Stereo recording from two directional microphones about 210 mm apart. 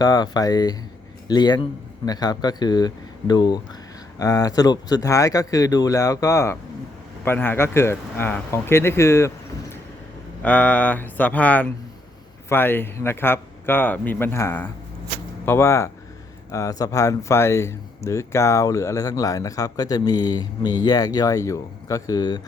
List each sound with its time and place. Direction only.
0.0 s speech: 20° left (ahead or behind)
10.4 s speech: 5° left (ahead or behind)